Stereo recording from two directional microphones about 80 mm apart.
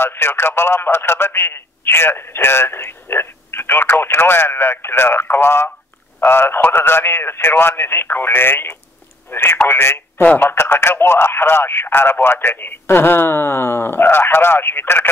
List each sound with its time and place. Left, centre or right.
0.0 s a man's voice: left